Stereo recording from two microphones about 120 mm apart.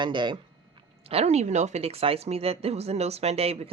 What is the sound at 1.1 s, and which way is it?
A woman's voice, 60° right (ahead or behind).